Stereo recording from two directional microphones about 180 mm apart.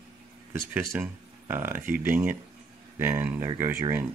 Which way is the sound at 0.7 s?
10° right (ahead or behind).